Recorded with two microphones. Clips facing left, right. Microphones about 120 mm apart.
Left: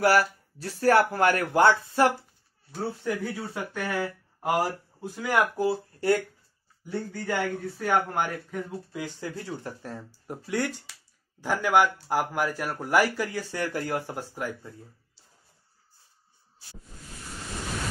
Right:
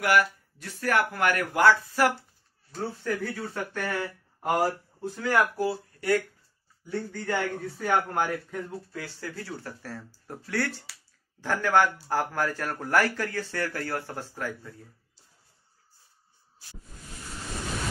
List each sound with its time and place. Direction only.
0.0 s speech: 35° left (ahead or behind)
2.7 s speech: 15° left (ahead or behind); by 6.2 s 30° left (ahead or behind)
6.9 s speech: 5° left (ahead or behind)
8.9 s speech: 20° left (ahead or behind)